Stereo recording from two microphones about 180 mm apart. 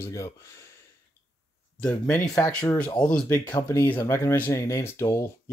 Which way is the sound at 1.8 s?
5° left (ahead or behind).